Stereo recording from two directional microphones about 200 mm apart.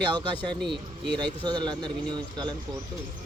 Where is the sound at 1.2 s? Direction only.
20° right (ahead or behind).